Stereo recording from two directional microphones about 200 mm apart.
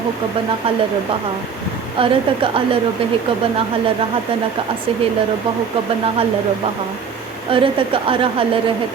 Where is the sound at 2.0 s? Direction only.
25° right (ahead or behind).